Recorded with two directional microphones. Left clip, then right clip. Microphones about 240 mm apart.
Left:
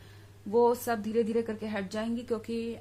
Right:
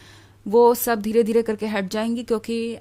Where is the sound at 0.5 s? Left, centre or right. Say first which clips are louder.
Right 9 dB; right.